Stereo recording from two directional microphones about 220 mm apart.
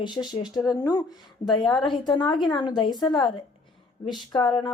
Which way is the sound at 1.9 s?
20° left (ahead or behind).